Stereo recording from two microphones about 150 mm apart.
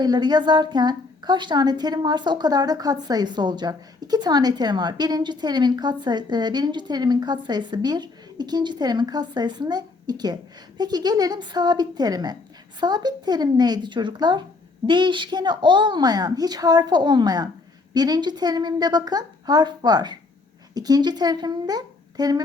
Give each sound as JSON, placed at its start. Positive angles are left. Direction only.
{"t": 0.0, "sound": "a woman's voice", "side_deg": -30}